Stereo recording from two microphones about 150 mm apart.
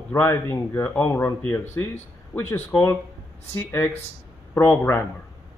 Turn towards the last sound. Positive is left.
turn(degrees=15)  # may be behind; listen again after turning